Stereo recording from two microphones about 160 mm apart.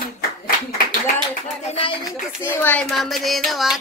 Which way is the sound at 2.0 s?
15° left (ahead or behind).